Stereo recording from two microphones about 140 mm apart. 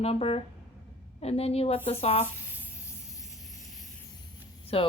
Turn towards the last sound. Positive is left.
turn(degrees=40)  # may be behind; listen again after turning